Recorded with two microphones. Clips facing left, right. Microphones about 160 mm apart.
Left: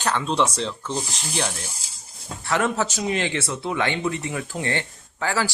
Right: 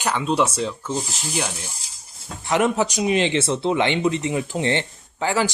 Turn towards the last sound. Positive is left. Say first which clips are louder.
# right 3 dB
turn(degrees=-20)  # may be behind; listen again after turning